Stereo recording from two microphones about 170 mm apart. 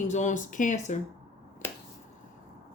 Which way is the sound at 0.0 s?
45° left (ahead or behind).